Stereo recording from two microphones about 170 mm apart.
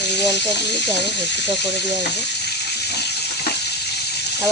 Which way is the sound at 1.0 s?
90° left.